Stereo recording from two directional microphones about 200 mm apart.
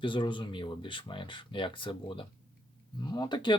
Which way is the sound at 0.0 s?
25° left (ahead or behind).